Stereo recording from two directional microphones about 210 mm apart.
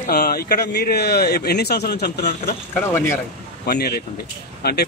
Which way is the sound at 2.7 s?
10° left (ahead or behind).